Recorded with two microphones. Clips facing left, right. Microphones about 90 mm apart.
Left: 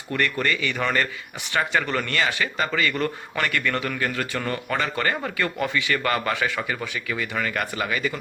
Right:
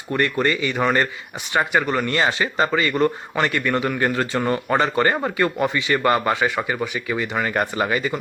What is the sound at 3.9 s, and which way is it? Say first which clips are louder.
A man's voice: right 6 dB; 30° right (ahead or behind).